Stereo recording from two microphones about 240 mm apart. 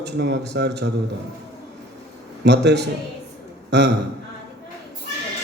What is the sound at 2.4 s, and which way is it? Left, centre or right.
Speech, right.